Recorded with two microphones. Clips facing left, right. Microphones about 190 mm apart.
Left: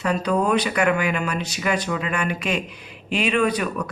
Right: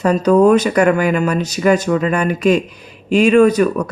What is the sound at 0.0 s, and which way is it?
Speech, 40° right (ahead or behind).